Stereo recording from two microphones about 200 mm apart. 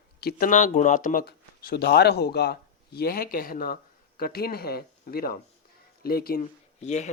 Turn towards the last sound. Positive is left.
turn(degrees=35)  # may be behind; listen again after turning